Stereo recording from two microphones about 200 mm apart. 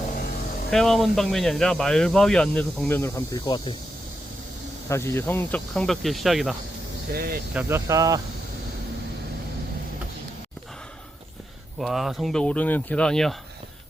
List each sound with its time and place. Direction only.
0.7 s speech: centre (ahead or behind); by 3.8 s 20° left (ahead or behind)
4.9 s speech: 15° left (ahead or behind)
7.1 s speech: 50° right (ahead or behind)
7.5 s speech: 10° right (ahead or behind)
11.8 s speech: centre (ahead or behind)